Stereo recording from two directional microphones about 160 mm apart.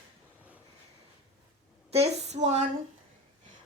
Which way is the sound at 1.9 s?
40° right (ahead or behind).